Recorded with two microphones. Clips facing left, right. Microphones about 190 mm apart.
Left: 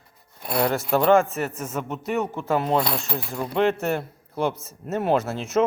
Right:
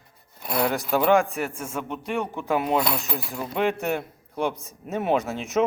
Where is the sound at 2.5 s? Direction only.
10° right (ahead or behind).